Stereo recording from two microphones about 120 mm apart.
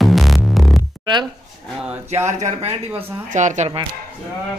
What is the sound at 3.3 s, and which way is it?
Speech, 90° right.